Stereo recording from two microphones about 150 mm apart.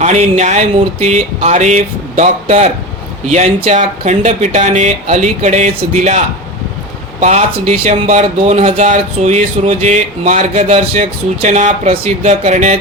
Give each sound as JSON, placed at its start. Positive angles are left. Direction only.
{"t": 0.0, "sound": "speech", "side_deg": -50}
{"t": 7.2, "sound": "speech", "side_deg": -50}